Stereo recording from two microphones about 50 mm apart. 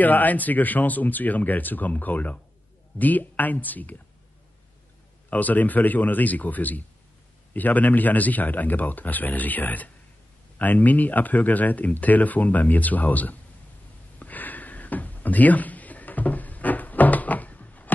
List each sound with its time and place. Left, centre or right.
0.0 s speech: left
5.3 s speech: left
14.2 s a sound: left